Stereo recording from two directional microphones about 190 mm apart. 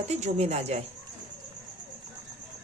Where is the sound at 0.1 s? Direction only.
35° right (ahead or behind).